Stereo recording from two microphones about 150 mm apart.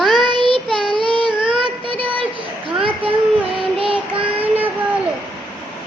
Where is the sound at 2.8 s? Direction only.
35° right (ahead or behind).